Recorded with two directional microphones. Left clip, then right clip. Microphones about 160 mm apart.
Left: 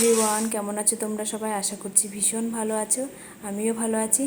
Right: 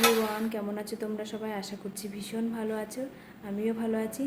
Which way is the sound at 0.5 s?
20° left (ahead or behind).